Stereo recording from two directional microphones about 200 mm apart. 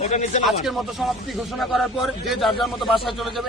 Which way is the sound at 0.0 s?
35° left (ahead or behind).